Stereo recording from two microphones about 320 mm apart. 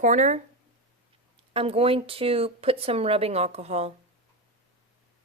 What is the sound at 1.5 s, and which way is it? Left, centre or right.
A woman's voice, centre.